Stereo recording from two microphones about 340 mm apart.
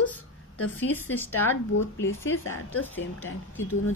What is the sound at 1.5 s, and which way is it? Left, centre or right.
Speech, left.